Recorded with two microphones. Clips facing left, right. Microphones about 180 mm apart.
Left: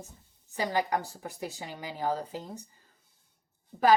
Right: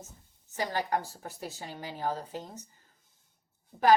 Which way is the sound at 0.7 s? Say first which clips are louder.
Left 2 dB; 15° left (ahead or behind).